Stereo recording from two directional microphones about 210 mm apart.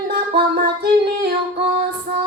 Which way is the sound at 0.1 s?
50° right (ahead or behind).